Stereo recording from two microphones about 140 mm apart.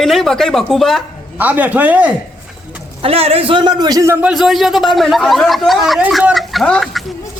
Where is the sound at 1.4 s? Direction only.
10° right (ahead or behind).